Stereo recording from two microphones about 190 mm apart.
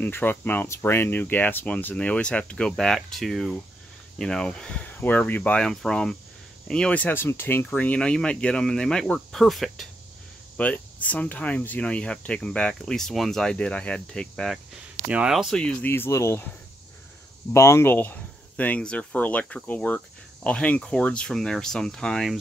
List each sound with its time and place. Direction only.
0.0 s speech: 10° left (ahead or behind)
17.5 s speech: 15° left (ahead or behind)